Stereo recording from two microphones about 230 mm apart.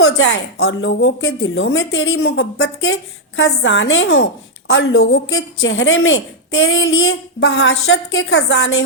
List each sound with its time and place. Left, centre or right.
0.0 s a woman's voice: left